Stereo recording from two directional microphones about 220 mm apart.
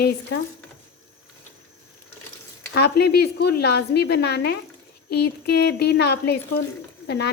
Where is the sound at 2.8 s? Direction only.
50° left (ahead or behind).